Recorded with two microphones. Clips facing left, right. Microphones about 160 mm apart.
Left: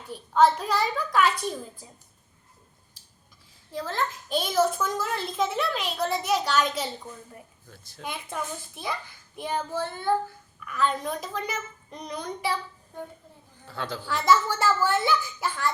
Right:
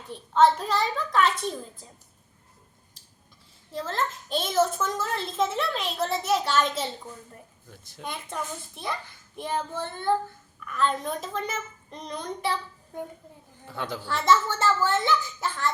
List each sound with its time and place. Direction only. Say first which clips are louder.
0.1 s a child's voice: even; 5° left (ahead or behind)
3.7 s a child's voice: even; centre (ahead or behind)
7.7 s a woman's voice: right 2 dB; 20° right (ahead or behind)
8.0 s a child's voice: even; centre (ahead or behind)
13.7 s a woman's voice: even; 20° right (ahead or behind)
14.0 s a child's voice: even; centre (ahead or behind)
14.5 s speech: even; 20° right (ahead or behind)